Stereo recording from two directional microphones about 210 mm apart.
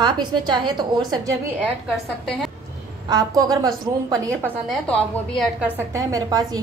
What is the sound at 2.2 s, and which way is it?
Speech, centre (ahead or behind).